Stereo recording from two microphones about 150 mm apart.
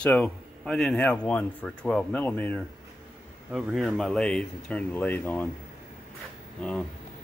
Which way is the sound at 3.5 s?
5° right (ahead or behind).